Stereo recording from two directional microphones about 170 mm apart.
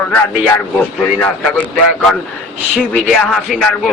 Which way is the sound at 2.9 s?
5° left (ahead or behind).